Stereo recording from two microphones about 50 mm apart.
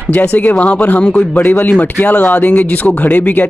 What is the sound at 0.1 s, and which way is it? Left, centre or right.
Speech, left.